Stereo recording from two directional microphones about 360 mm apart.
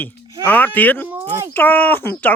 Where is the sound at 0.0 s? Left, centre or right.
Centre.